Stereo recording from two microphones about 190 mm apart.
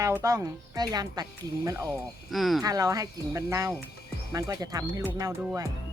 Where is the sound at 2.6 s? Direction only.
20° right (ahead or behind).